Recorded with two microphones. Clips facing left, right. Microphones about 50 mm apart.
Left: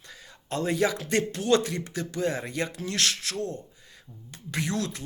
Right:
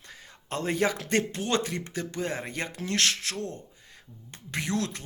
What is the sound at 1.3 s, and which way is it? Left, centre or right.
Speech, right.